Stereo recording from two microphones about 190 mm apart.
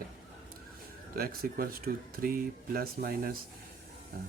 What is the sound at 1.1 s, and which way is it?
Speech, 50° right (ahead or behind).